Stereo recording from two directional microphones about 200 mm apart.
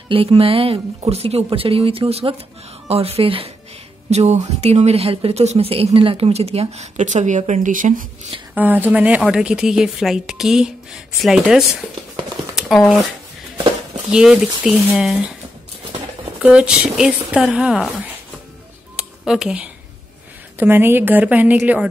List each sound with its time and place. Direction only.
0.1 s speech: 25° right (ahead or behind)
8.5 s speech: 10° right (ahead or behind)
14.1 s speech: 5° right (ahead or behind)
16.3 s speech: 5° right (ahead or behind)
18.9 s a sound: 5° right (ahead or behind)
20.5 s a woman's voice: 10° right (ahead or behind)